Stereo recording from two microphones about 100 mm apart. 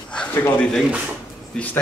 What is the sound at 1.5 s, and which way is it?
Speech, 15° left (ahead or behind).